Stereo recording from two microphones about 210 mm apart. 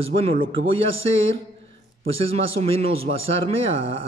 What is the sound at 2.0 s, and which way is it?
A man's voice, 30° right (ahead or behind).